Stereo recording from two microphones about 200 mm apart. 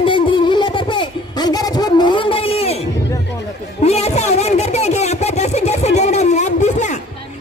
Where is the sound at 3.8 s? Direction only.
30° left (ahead or behind).